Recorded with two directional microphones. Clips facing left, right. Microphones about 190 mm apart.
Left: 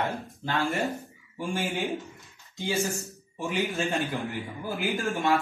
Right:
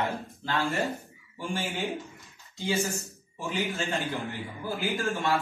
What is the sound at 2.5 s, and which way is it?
A man's voice, 15° left (ahead or behind).